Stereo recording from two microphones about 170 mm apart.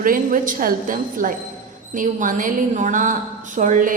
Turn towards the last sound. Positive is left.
turn(degrees=-50)  # may be behind; listen again after turning